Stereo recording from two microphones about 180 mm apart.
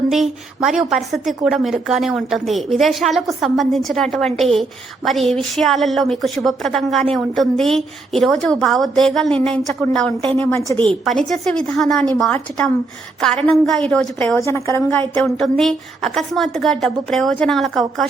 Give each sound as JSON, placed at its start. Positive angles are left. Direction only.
{"t": 0.1, "sound": "a woman's voice", "side_deg": 0}
{"t": 10.7, "sound": "a woman's voice", "side_deg": 15}
{"t": 11.2, "sound": "a woman's voice", "side_deg": 5}
{"t": 14.3, "sound": "a woman's voice", "side_deg": 15}
{"t": 15.2, "sound": "a woman's voice", "side_deg": 0}